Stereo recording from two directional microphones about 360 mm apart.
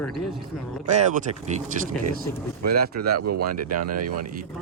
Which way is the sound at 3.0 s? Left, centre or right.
Right.